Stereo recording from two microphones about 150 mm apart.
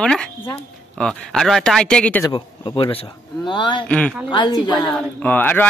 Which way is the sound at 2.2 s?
35° left (ahead or behind).